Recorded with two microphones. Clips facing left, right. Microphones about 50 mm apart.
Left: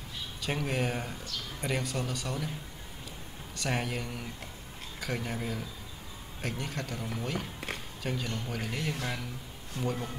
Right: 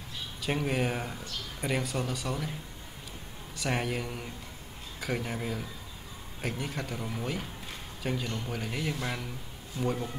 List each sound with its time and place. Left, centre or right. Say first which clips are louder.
0.4 s speech: right 2 dB; centre
3.5 s speech: right 2 dB; centre